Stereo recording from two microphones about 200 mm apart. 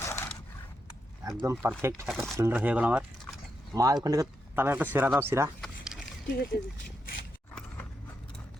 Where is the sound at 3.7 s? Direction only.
20° right (ahead or behind).